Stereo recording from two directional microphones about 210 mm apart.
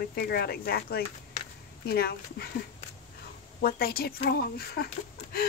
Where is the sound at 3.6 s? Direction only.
45° left (ahead or behind).